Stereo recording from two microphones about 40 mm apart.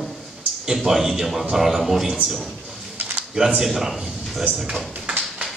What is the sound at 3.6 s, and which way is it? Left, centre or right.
Speech, centre.